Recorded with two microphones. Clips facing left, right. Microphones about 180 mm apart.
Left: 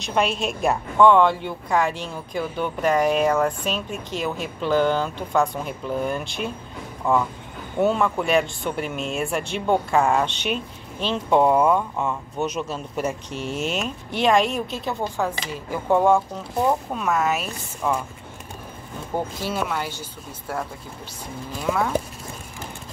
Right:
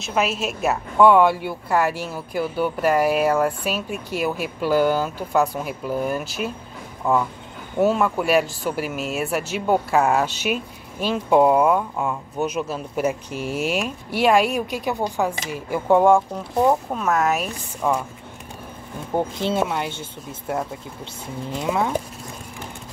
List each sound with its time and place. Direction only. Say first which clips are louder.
0.0 s a woman's voice: even; 5° right (ahead or behind)
16.9 s speech: right 2 dB; centre (ahead or behind)
19.1 s speech: right 4 dB; 25° right (ahead or behind)